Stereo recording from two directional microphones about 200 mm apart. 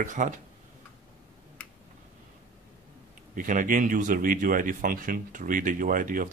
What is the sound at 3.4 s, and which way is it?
A man's voice, 40° right (ahead or behind).